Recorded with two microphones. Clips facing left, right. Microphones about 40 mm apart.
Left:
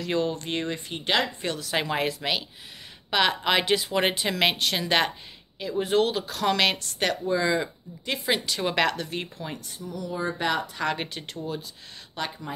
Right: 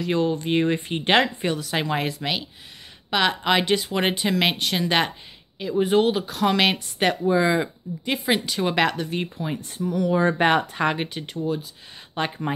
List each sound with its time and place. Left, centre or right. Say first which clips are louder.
0.0 s speech: right 4 dB; centre
0.6 s speech: right 8 dB; right
1.4 s speech: right 5 dB; centre
1.7 s speech: right 1 dB; centre
9.8 s speech: right 9 dB; right
11.0 s speech: right 5 dB; centre
12.2 s speech: right 7 dB; right